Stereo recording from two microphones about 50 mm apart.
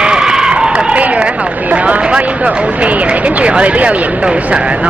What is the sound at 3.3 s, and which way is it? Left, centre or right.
Speech, right.